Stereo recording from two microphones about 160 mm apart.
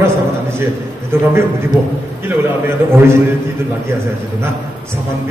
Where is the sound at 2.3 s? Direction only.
15° right (ahead or behind).